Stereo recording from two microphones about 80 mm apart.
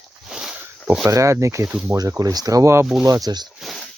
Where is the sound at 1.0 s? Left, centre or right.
Right.